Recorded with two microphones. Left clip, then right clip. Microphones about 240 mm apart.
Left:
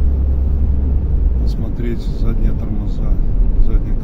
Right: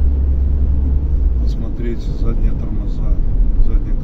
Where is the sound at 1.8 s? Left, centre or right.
Left.